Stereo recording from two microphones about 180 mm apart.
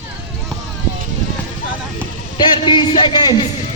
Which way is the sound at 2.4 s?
25° left (ahead or behind).